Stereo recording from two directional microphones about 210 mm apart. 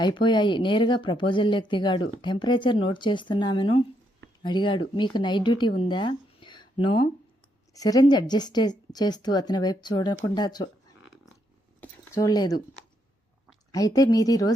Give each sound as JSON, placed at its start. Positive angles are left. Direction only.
{"t": 0.0, "sound": "a woman's voice", "side_deg": 20}
{"t": 11.8, "sound": "a sound", "side_deg": 15}
{"t": 13.7, "sound": "speech", "side_deg": 15}